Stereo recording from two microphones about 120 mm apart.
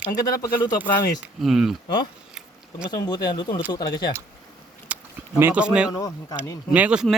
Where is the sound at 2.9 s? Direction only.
35° left (ahead or behind).